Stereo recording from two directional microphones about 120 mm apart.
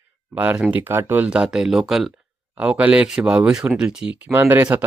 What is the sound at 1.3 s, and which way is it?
Speech, 5° right (ahead or behind).